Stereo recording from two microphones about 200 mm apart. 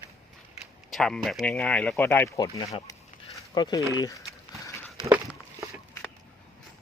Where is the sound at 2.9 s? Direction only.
20° left (ahead or behind).